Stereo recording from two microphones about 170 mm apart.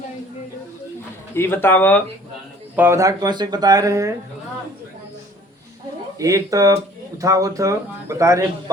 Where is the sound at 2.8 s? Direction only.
15° right (ahead or behind).